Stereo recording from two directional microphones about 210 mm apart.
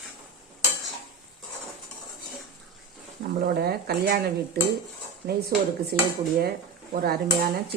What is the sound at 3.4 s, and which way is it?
Speech, 45° right (ahead or behind).